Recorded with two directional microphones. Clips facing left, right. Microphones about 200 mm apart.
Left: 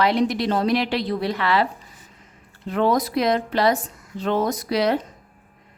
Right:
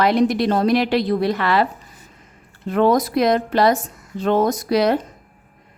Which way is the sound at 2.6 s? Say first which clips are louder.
Right 4 dB; 50° right (ahead or behind).